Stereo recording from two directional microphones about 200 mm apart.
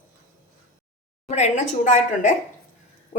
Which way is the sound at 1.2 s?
35° left (ahead or behind).